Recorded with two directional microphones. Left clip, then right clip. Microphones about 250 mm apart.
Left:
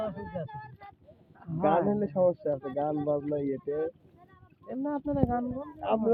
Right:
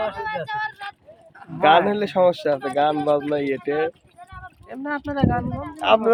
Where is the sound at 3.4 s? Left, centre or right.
Right.